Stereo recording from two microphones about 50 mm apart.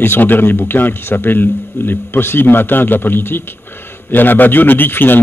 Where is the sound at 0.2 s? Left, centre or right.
Left.